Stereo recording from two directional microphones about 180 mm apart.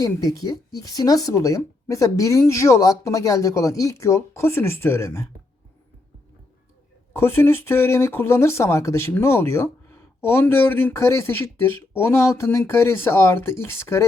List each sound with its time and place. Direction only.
0.0 s speech: 20° left (ahead or behind)
7.1 s speech: 15° left (ahead or behind)